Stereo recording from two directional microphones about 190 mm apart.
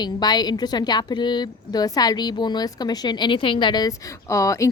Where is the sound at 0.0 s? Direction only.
20° left (ahead or behind).